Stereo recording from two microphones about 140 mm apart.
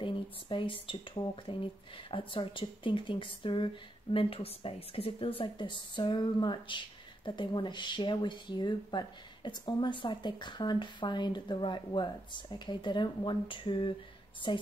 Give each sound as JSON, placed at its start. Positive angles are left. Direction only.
{"t": 0.0, "sound": "speech", "side_deg": 35}